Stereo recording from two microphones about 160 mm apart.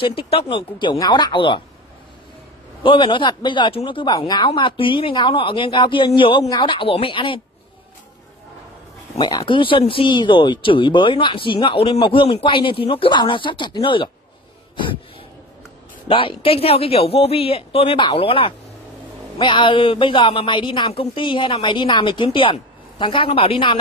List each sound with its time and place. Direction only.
0.0 s speech: 35° left (ahead or behind)
2.8 s speech: 30° left (ahead or behind)
9.3 s speech: 25° left (ahead or behind)
16.1 s speech: 35° left (ahead or behind)